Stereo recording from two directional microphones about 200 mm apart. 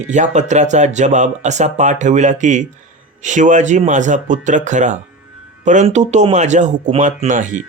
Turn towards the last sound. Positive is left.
turn(degrees=-40)  # may be behind; listen again after turning